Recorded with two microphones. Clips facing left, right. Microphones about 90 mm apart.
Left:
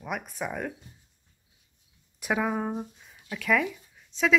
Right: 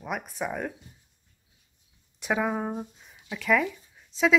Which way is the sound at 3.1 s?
15° right (ahead or behind).